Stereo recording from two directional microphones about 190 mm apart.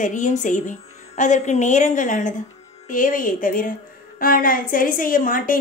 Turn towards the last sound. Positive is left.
turn(degrees=45)  # may be behind; listen again after turning